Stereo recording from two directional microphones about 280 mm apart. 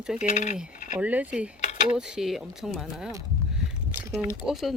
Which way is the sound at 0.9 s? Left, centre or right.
Centre.